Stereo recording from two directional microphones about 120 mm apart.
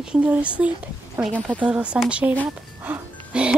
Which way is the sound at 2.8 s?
10° right (ahead or behind).